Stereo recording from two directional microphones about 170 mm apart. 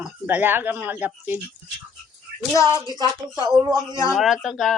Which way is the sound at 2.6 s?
15° left (ahead or behind).